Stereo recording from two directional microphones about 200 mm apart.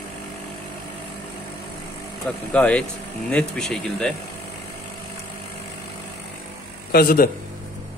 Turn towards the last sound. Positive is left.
turn(degrees=45)  # may be behind; listen again after turning